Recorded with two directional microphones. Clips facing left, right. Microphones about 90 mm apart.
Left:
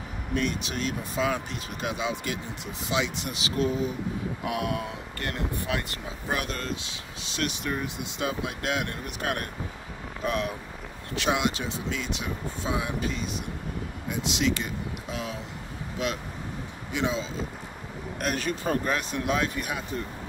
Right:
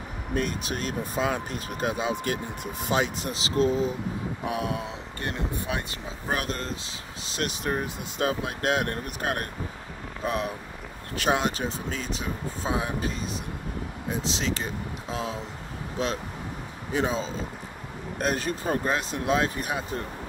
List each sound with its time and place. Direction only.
0.3 s speech: 40° right (ahead or behind); by 6.1 s 20° right (ahead or behind)
6.2 s speech: 35° right (ahead or behind)